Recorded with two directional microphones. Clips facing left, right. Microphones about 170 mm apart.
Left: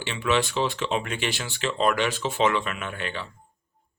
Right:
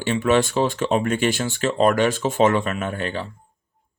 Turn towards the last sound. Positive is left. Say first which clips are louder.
# right 7 dB
turn(degrees=-40)  # may be behind; listen again after turning